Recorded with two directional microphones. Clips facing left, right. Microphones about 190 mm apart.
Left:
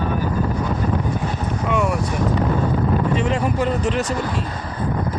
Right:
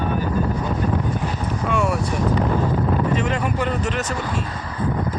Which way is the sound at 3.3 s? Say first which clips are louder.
Left 2 dB; 35° left (ahead or behind).